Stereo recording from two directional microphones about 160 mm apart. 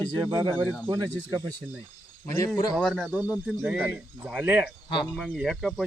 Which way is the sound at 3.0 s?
10° right (ahead or behind).